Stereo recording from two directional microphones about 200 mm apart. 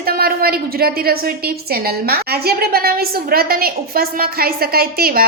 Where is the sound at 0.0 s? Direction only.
50° right (ahead or behind).